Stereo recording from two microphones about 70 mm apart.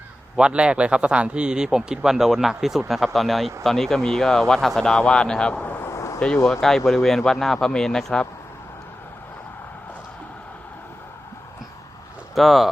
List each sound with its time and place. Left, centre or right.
0.3 s speech: centre
5.8 s a sound: left
6.1 s speech: centre
12.3 s speech: centre